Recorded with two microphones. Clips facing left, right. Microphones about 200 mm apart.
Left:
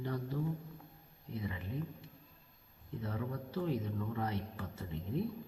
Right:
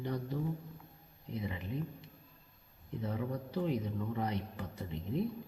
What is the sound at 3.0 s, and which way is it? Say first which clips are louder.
A man's voice: right 3 dB; 20° right (ahead or behind).